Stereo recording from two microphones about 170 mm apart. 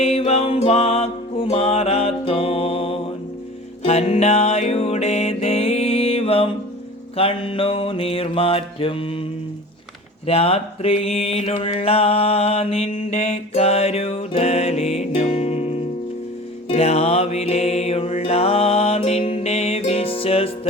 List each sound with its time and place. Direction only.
0.0 s music: 35° left (ahead or behind)
7.2 s mantra: 35° left (ahead or behind)
10.2 s mantra: 35° left (ahead or behind)